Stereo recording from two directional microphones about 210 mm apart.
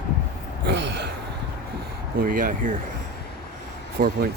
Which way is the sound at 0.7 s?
55° right (ahead or behind).